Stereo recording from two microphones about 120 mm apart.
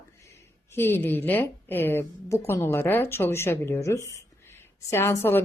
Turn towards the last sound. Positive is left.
turn(degrees=20)  # may be behind; listen again after turning